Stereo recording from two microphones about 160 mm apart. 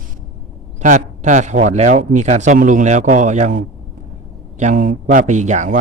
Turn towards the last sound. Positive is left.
turn(degrees=-50)  # may be behind; listen again after turning